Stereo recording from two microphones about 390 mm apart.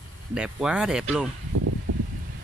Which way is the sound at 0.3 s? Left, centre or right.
Centre.